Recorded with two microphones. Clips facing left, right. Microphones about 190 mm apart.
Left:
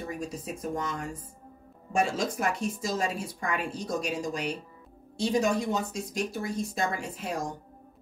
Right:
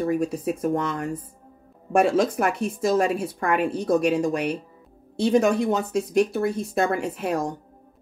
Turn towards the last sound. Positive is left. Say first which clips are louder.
# right 8 dB
turn(degrees=-60)  # may be behind; listen again after turning